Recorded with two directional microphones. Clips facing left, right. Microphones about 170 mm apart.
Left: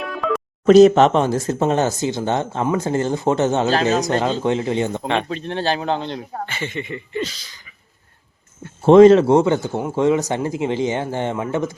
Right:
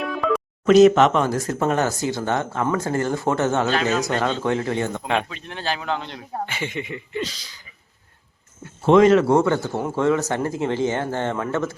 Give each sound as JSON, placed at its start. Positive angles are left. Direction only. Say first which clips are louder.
{"t": 0.0, "sound": "music", "louder": "even", "side_deg": 0}
{"t": 0.6, "sound": "speech", "louder": "left 3 dB", "side_deg": 30}
{"t": 3.7, "sound": "speech", "louder": "left 4 dB", "side_deg": 35}
{"t": 4.4, "sound": "speech", "louder": "left 3 dB", "side_deg": 20}
{"t": 5.3, "sound": "speech", "louder": "left 7 dB", "side_deg": 30}
{"t": 6.4, "sound": "speech", "louder": "right 3 dB", "side_deg": -10}
{"t": 8.8, "sound": "speech", "louder": "left 5 dB", "side_deg": 30}